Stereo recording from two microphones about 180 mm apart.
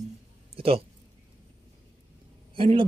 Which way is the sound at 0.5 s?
30° right (ahead or behind).